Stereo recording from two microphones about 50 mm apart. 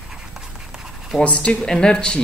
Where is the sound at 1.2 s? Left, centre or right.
Left.